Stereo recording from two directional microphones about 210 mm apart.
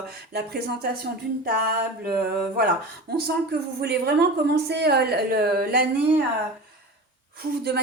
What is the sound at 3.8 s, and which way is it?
A woman's voice, 50° right (ahead or behind).